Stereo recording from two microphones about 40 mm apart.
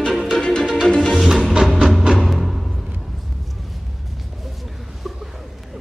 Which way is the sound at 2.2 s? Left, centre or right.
Centre.